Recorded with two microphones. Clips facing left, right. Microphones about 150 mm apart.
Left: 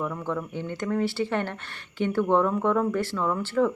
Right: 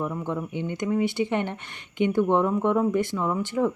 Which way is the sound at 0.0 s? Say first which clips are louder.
Right 1 dB; 15° right (ahead or behind).